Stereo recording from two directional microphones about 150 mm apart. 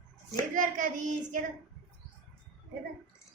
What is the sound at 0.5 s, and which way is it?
Child singing, 60° right (ahead or behind).